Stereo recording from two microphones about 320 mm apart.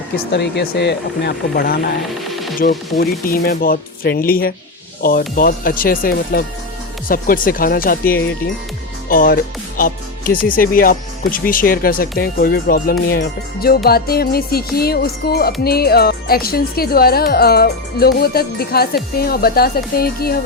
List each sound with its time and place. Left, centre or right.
0.3 s speech: left